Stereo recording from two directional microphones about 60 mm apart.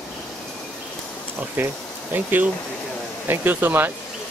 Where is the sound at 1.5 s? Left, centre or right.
Right.